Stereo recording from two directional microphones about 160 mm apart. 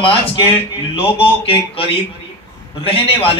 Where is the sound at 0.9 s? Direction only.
35° left (ahead or behind).